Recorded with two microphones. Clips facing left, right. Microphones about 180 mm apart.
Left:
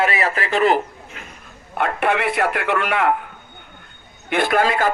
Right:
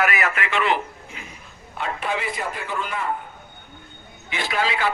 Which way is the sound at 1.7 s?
60° left (ahead or behind).